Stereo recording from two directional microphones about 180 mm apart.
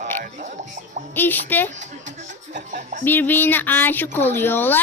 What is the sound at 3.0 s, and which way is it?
Speech, 10° left (ahead or behind).